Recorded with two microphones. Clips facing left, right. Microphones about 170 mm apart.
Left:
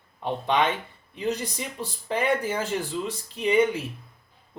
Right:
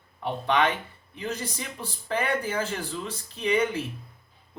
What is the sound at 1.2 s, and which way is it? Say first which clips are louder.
Speech: left 4 dB; 15° left (ahead or behind).